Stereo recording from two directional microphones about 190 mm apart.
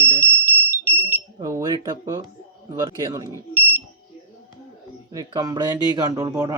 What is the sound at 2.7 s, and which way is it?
Speech, 20° right (ahead or behind).